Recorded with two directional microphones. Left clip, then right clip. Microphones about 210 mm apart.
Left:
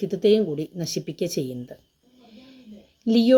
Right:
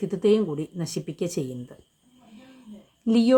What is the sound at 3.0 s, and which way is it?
Speech, centre (ahead or behind).